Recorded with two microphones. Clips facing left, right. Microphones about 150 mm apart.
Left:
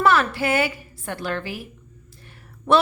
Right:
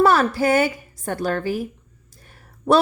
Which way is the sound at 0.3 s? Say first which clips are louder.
Right 4 dB; 45° right (ahead or behind).